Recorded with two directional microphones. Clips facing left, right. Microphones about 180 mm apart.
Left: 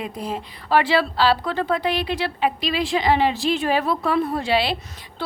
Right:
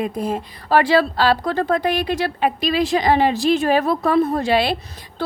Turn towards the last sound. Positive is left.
turn(degrees=-50)  # may be behind; listen again after turning